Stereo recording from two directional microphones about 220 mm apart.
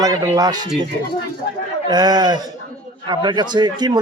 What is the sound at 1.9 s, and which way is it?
A man's voice, 20° right (ahead or behind).